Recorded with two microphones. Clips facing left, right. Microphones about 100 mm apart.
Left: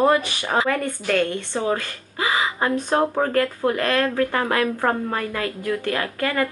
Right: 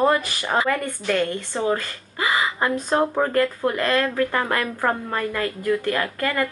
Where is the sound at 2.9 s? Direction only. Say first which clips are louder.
Even; 10° left (ahead or behind).